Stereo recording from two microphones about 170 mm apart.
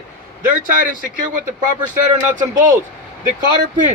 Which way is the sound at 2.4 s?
50° right (ahead or behind).